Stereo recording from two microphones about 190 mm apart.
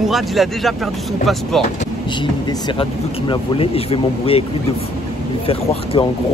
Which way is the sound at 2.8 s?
30° left (ahead or behind).